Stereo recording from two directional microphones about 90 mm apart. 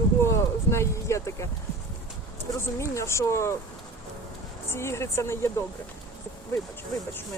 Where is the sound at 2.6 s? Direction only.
35° left (ahead or behind).